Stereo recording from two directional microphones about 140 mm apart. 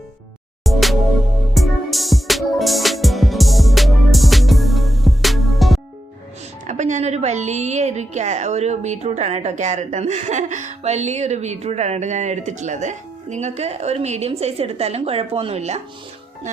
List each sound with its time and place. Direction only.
0.6 s music: centre (ahead or behind)
6.7 s a woman's voice: 60° right (ahead or behind)